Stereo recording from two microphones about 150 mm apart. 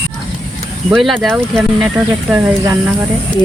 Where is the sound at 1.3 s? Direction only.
15° right (ahead or behind).